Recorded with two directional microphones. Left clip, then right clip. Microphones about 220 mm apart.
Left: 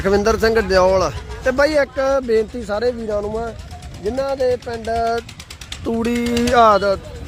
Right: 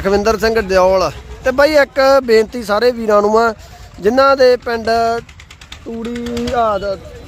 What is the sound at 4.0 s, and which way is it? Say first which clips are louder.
Speech: right 10 dB; 25° right (ahead or behind).